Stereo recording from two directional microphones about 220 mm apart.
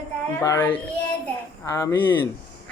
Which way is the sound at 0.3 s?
10° left (ahead or behind).